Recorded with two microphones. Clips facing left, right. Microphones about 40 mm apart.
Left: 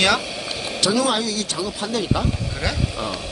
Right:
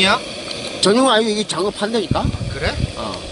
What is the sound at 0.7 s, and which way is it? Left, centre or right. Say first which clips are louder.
Speech: right 7 dB; right.